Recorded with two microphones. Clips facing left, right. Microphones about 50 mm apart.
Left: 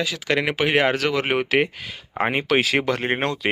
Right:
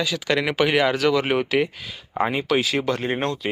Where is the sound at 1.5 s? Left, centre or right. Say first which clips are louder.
Left 1 dB; left.